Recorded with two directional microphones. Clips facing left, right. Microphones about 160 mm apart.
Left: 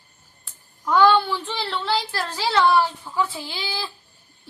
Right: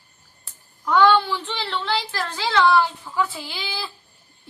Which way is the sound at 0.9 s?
5° left (ahead or behind).